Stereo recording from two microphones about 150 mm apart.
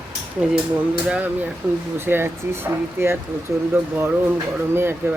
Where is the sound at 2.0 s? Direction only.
15° right (ahead or behind).